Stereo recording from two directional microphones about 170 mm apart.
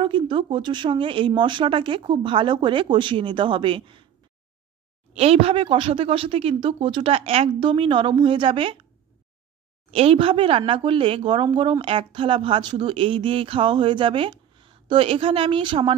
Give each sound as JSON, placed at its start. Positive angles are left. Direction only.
{"t": 0.0, "sound": "speech", "side_deg": -30}
{"t": 5.1, "sound": "speech", "side_deg": -35}
{"t": 9.8, "sound": "speech", "side_deg": -35}